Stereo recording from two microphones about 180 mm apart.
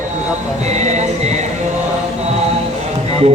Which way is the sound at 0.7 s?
40° right (ahead or behind).